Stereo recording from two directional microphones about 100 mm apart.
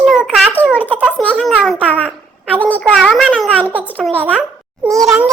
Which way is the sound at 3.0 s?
Centre (ahead or behind).